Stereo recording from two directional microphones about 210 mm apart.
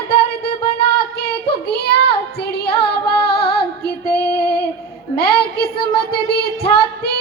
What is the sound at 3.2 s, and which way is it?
Female singing, 50° left (ahead or behind).